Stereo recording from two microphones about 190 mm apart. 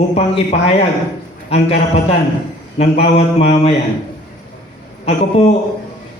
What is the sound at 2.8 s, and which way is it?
Speech, 30° left (ahead or behind).